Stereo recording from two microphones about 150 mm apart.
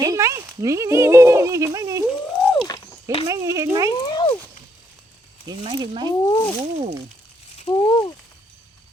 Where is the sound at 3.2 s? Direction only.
20° right (ahead or behind).